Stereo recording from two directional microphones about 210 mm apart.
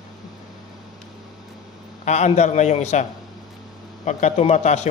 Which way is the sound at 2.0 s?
35° left (ahead or behind).